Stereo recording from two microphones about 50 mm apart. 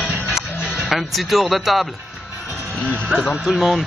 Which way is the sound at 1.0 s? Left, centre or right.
Centre.